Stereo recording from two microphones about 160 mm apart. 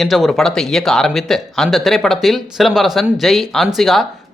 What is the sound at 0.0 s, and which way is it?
Speech, centre (ahead or behind).